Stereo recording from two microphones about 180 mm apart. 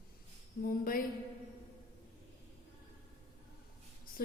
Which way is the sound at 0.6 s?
55° left (ahead or behind).